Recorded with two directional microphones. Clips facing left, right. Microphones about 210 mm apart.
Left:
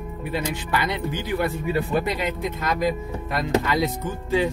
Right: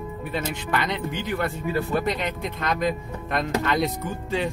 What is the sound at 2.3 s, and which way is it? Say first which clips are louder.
Speech: left 2 dB; centre (ahead or behind).